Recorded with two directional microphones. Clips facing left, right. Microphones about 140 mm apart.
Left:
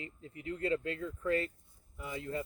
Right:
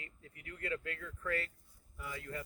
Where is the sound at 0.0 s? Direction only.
25° left (ahead or behind).